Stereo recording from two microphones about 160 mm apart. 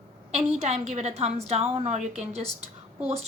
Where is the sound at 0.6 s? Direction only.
45° right (ahead or behind).